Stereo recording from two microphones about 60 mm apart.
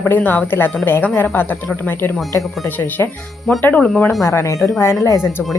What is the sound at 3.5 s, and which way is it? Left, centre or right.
Speech, centre.